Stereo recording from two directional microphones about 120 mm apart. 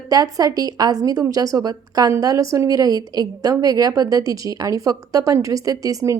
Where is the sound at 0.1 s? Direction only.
30° right (ahead or behind).